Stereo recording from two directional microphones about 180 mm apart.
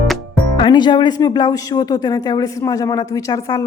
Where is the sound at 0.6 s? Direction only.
25° left (ahead or behind).